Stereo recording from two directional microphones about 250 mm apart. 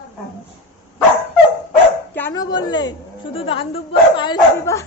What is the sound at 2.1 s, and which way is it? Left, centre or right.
A woman's voice, centre.